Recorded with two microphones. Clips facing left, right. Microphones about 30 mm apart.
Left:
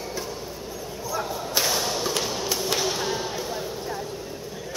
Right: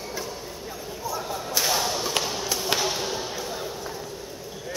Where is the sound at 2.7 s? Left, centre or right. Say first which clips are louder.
Right 2 dB; centre.